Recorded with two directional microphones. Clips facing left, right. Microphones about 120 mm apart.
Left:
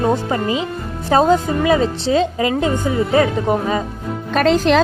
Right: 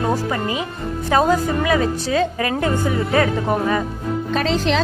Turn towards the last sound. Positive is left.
turn(degrees=45)  # may be behind; listen again after turning